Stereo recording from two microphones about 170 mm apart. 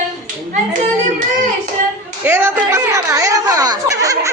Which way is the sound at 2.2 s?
15° right (ahead or behind).